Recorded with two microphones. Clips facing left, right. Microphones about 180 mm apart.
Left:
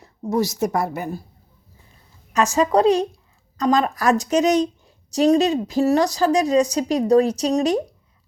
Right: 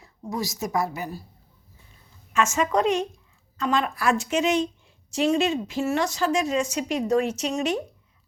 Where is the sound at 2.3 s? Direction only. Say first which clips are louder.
Left 5 dB; 35° left (ahead or behind).